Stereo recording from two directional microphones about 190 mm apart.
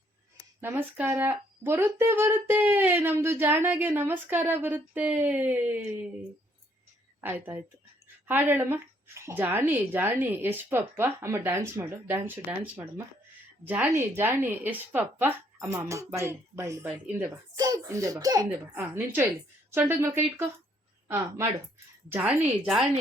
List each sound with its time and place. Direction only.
0.6 s speech: 10° right (ahead or behind)
7.2 s a child's voice: 10° right (ahead or behind)
22.1 s a woman's voice: 5° right (ahead or behind)